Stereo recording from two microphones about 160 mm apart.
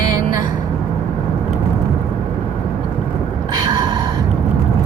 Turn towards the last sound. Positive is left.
turn(degrees=-25)  # may be behind; listen again after turning